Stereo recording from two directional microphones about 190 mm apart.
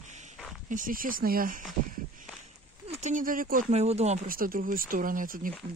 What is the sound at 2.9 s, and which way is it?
Speech, 40° right (ahead or behind).